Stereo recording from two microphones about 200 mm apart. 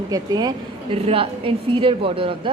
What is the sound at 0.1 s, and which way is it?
A woman's voice, 20° right (ahead or behind).